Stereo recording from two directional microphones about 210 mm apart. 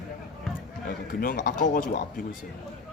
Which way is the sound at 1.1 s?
45° left (ahead or behind).